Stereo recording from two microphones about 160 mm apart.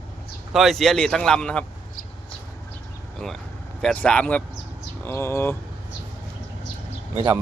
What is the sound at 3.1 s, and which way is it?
Speech, centre (ahead or behind).